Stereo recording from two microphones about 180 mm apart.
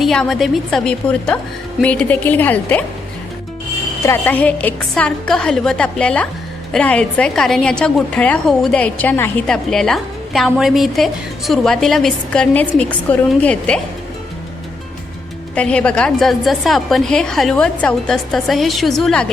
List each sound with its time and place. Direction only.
0.0 s a woman's voice: centre (ahead or behind)
4.0 s a woman's voice: 10° left (ahead or behind)
15.5 s a woman's voice: 5° left (ahead or behind)